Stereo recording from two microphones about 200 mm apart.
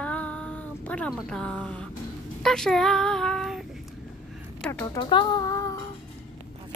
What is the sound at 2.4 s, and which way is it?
Child singing, 5° left (ahead or behind).